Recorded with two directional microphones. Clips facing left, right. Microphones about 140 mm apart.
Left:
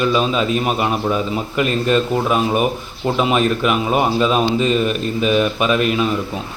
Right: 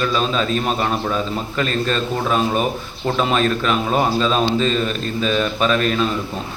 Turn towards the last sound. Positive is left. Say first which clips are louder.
# left 1 dB
turn(degrees=10)  # may be behind; listen again after turning